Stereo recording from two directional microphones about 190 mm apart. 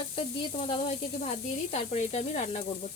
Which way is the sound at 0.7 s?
35° left (ahead or behind).